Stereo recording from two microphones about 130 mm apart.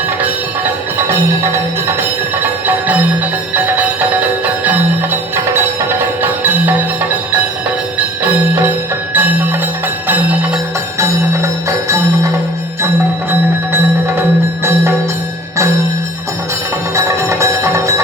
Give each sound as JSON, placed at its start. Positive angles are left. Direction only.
{"t": 0.2, "sound": "music", "side_deg": -15}
{"t": 8.2, "sound": "music", "side_deg": -15}
{"t": 11.0, "sound": "music", "side_deg": -20}
{"t": 14.2, "sound": "music", "side_deg": -20}
{"t": 16.9, "sound": "music", "side_deg": -20}